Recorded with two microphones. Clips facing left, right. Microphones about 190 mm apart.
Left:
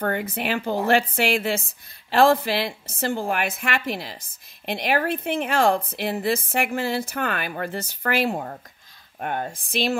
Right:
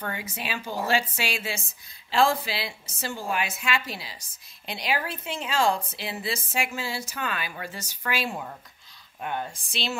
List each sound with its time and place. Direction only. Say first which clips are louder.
0.0 s a woman's voice: left 9 dB; 55° left (ahead or behind)